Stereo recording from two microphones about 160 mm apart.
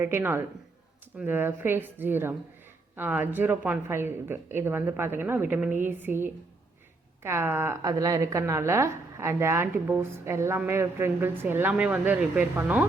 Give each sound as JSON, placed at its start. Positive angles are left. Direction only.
{"t": 0.0, "sound": "speech", "side_deg": -15}